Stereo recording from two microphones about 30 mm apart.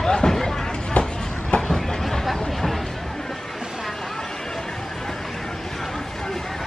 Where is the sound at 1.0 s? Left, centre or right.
Left.